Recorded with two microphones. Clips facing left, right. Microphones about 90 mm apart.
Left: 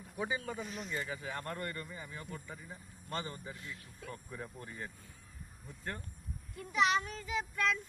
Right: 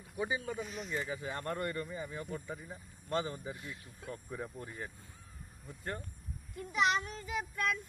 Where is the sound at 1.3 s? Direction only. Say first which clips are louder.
Right 3 dB; 25° right (ahead or behind).